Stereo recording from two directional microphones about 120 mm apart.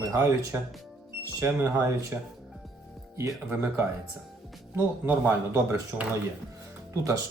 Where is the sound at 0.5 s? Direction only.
15° right (ahead or behind).